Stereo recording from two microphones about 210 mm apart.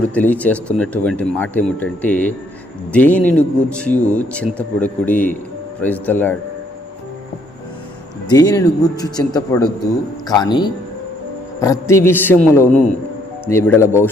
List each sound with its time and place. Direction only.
0.1 s speech: 5° left (ahead or behind)
8.3 s a man's voice: 20° left (ahead or behind)